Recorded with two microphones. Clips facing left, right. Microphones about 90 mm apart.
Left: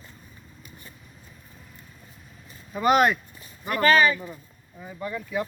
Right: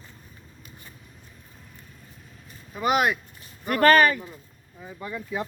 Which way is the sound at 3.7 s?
50° right (ahead or behind).